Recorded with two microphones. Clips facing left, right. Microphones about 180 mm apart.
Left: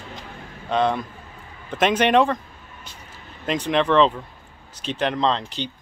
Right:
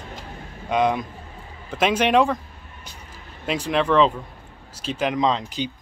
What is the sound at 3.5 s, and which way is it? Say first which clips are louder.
Speech: left 1 dB; 5° right (ahead or behind).